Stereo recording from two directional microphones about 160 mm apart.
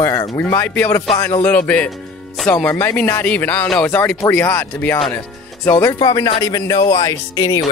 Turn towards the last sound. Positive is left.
turn(degrees=20)  # may be behind; listen again after turning